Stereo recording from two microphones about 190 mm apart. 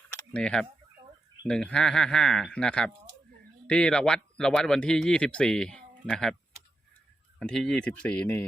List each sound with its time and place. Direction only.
0.1 s a sound: 5° left (ahead or behind)
1.5 s speech: 5° left (ahead or behind)
7.3 s speech: 5° left (ahead or behind)